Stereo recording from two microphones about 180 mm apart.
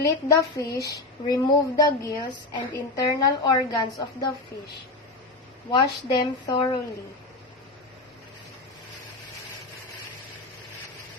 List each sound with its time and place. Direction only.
0.0 s a woman's voice: 15° left (ahead or behind)
5.7 s a woman's voice: 25° left (ahead or behind)